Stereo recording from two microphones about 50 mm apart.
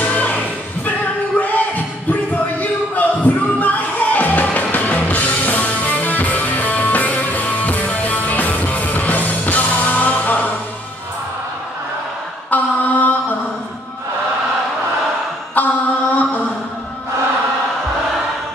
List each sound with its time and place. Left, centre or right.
0.0 s music: left
1.4 s a sound: left
4.7 s music: left
12.4 s mantra: left
15.5 s mantra: left